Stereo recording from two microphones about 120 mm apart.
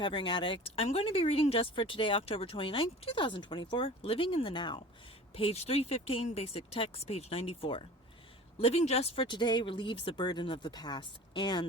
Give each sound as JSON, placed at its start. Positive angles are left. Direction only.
{"t": 0.0, "sound": "speech", "side_deg": 40}
{"t": 5.3, "sound": "a woman's voice", "side_deg": 55}
{"t": 9.2, "sound": "speech", "side_deg": 40}